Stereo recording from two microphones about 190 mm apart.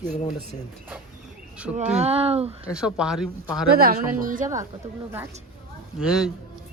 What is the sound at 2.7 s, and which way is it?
Speech, 5° right (ahead or behind).